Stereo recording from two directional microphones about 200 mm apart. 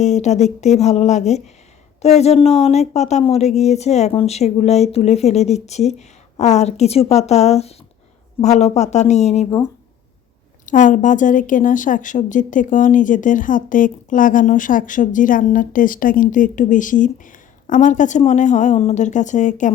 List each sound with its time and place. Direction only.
0.0 s a woman's voice: 35° left (ahead or behind)
10.7 s a woman's voice: 40° left (ahead or behind)